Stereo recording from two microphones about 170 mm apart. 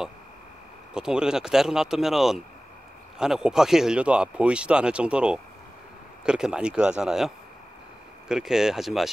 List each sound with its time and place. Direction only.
0.9 s speech: 5° right (ahead or behind)